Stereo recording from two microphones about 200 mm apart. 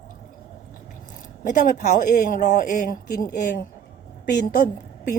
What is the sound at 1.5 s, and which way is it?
Speech, 40° left (ahead or behind).